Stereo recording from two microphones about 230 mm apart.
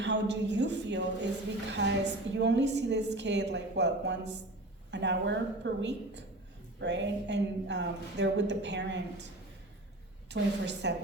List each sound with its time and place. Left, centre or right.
0.0 s speech: right
10.2 s speech: right